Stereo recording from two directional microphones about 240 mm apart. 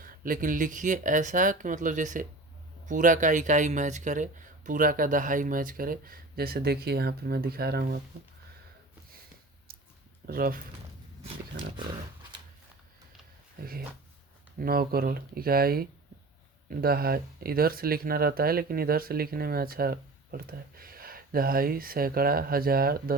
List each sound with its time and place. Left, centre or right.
0.0 s speech: right
9.7 s a sound: right
10.2 s speech: right
13.6 s speech: right